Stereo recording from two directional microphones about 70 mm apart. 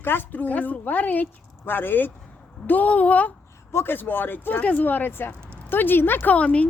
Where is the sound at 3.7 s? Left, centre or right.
Left.